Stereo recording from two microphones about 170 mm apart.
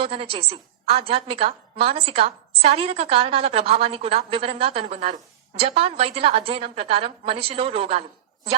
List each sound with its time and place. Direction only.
0.0 s a woman's voice: 35° right (ahead or behind)